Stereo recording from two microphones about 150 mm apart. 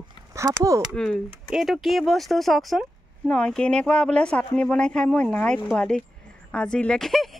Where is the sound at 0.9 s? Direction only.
5° left (ahead or behind).